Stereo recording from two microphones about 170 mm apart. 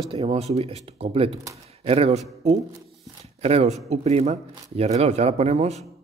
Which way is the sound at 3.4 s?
40° right (ahead or behind).